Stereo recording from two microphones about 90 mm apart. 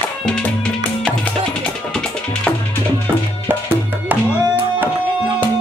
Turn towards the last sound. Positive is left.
turn(degrees=-20)  # may be behind; listen again after turning